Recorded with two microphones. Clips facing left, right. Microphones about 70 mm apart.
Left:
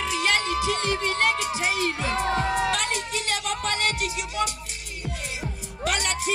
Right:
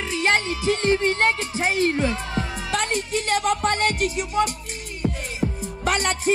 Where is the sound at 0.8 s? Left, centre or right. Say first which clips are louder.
Right 4 dB; right.